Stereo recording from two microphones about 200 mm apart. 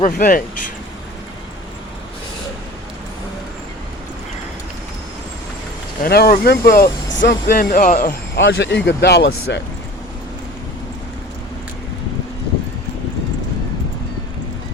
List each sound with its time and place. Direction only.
0.0 s speech: 40° left (ahead or behind)
6.0 s speech: 50° left (ahead or behind)
7.2 s speech: 60° left (ahead or behind)
7.5 s speech: 45° left (ahead or behind)
8.4 s speech: 55° left (ahead or behind)